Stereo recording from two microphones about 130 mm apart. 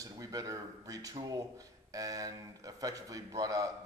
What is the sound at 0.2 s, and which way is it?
A man's voice, 30° right (ahead or behind).